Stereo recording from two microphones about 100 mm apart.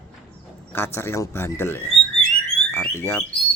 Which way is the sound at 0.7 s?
25° left (ahead or behind).